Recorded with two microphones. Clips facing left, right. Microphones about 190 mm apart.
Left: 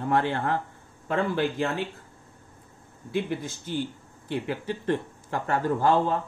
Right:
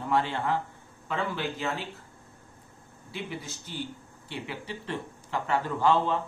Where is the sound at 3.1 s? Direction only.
50° left (ahead or behind).